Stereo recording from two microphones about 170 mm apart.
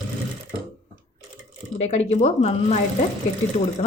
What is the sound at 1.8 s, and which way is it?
Speech, 40° left (ahead or behind).